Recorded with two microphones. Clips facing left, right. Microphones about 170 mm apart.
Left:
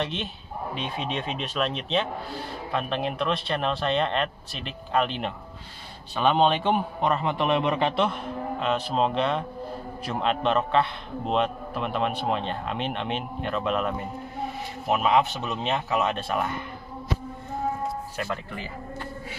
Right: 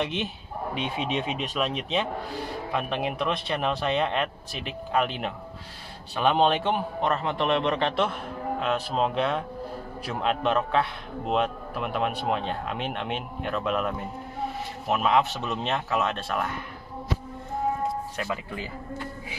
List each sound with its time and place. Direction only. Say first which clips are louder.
0.7 s a man's voice: right 3 dB; 15° right (ahead or behind)
18.1 s speech: even; centre (ahead or behind)